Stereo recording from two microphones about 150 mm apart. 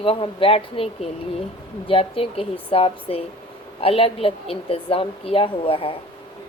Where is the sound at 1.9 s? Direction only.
40° left (ahead or behind).